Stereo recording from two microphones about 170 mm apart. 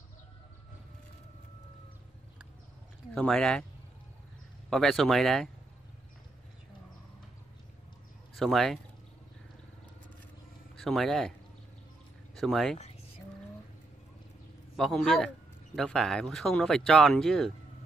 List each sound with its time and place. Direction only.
3.2 s speech: 5° left (ahead or behind)
4.6 s speech: centre (ahead or behind)
8.4 s speech: centre (ahead or behind)
10.8 s speech: centre (ahead or behind)
12.4 s speech: centre (ahead or behind)
12.7 s music: 40° left (ahead or behind)
14.8 s speech: centre (ahead or behind)